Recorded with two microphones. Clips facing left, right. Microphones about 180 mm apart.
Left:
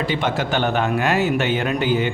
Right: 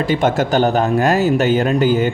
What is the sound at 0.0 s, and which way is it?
Speech, 45° right (ahead or behind).